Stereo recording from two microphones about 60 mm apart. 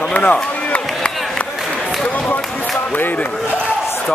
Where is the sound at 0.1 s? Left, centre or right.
Left.